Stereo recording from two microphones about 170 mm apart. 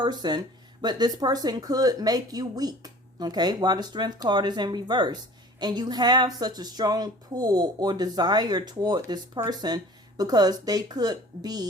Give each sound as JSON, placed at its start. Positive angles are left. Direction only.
{"t": 0.0, "sound": "speech", "side_deg": -25}